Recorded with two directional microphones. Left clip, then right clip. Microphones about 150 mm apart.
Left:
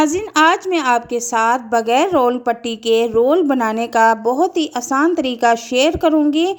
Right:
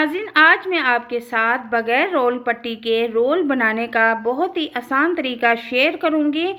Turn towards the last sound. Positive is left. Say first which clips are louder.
# left 4 dB
turn(degrees=60)  # may be behind; listen again after turning